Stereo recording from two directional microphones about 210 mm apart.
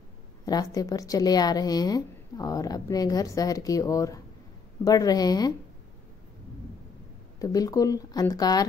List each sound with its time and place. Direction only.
0.5 s a woman's voice: 15° left (ahead or behind)
7.3 s a woman's voice: 15° left (ahead or behind)